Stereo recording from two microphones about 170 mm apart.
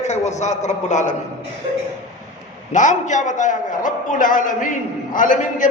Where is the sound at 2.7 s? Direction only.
45° left (ahead or behind).